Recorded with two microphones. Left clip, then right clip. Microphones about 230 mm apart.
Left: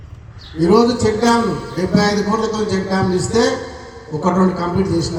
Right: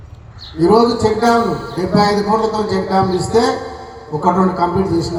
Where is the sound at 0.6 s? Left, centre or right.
Left.